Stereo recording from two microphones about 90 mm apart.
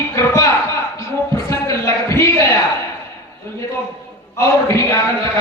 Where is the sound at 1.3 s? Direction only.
35° left (ahead or behind).